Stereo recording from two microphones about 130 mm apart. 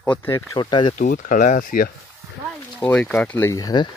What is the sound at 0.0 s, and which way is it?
Speech, 10° left (ahead or behind).